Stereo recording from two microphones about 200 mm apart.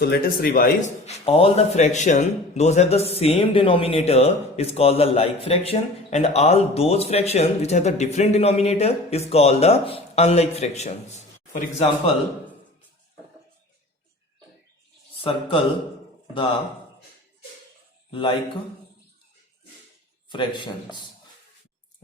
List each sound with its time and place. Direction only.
0.0 s speech: 50° left (ahead or behind)
1.0 s speech: 30° left (ahead or behind)
15.2 s speech: 25° left (ahead or behind)
18.1 s a man's voice: 25° left (ahead or behind)
20.3 s speech: 25° left (ahead or behind)